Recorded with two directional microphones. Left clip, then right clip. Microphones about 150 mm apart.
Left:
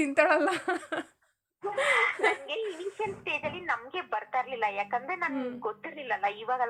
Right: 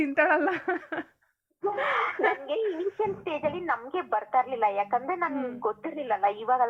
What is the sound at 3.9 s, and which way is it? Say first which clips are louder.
A woman's voice: right 5 dB; 5° right (ahead or behind).